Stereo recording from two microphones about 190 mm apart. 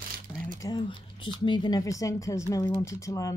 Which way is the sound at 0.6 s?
25° left (ahead or behind).